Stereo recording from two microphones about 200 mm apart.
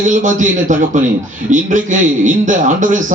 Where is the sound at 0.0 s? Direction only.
40° right (ahead or behind).